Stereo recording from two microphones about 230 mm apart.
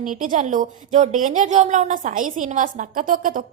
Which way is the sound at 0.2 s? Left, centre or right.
Right.